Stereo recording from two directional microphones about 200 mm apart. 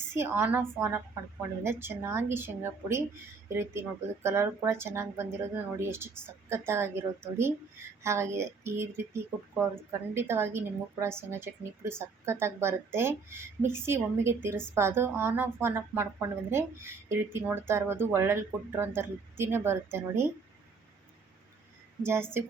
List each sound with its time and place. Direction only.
0.1 s speech: 10° right (ahead or behind)
22.0 s speech: 10° right (ahead or behind)